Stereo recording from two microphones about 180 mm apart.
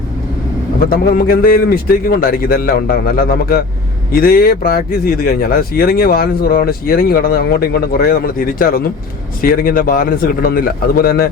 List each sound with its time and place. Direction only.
0.9 s a man's voice: 55° left (ahead or behind)